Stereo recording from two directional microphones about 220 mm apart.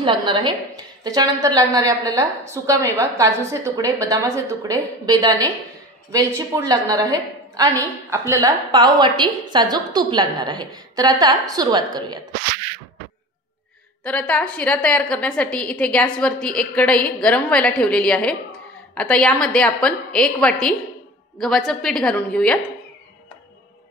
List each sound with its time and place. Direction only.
0.0 s a woman's voice: 20° right (ahead or behind)
14.0 s a woman's voice: 5° left (ahead or behind)